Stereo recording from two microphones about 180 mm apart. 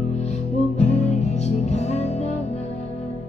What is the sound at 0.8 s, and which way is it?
Music, 40° left (ahead or behind).